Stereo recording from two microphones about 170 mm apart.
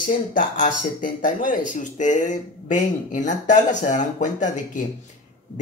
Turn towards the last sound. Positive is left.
turn(degrees=45)  # may be behind; listen again after turning